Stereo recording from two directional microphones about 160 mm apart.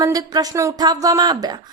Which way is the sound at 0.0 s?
25° right (ahead or behind).